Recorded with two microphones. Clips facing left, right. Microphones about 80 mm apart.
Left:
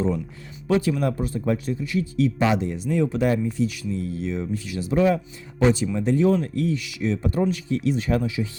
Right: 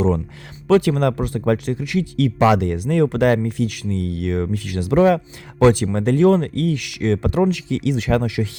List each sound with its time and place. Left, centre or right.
0.7 s speech: right